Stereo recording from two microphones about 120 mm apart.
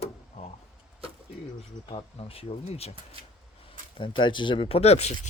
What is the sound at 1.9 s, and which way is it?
Speech, 50° left (ahead or behind).